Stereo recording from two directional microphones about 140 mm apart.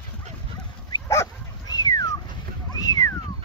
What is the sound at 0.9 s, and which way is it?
Dog, 25° left (ahead or behind).